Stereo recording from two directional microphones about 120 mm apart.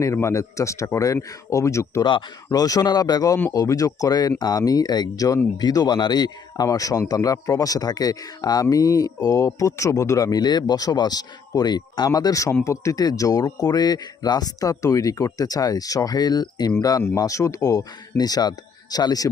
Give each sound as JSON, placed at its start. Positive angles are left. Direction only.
{"t": 0.0, "sound": "a man's voice", "side_deg": 25}